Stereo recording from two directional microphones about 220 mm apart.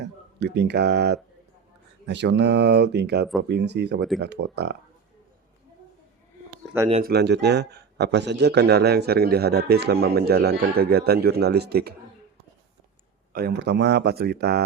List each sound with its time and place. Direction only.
0.0 s speech: 50° right (ahead or behind)
7.1 s speech: 50° right (ahead or behind)
13.3 s speech: 45° right (ahead or behind)